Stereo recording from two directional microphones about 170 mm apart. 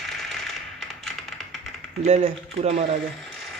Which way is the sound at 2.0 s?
40° right (ahead or behind).